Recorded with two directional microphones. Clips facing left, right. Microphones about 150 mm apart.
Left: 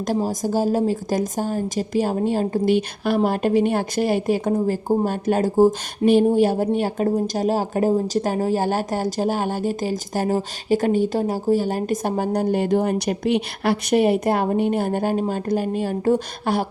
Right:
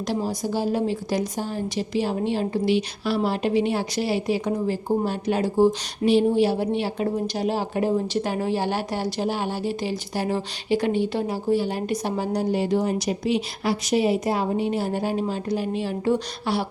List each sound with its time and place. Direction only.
0.1 s speech: 45° left (ahead or behind)